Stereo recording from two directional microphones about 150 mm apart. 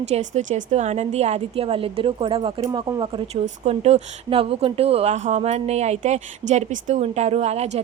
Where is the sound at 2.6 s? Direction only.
25° right (ahead or behind).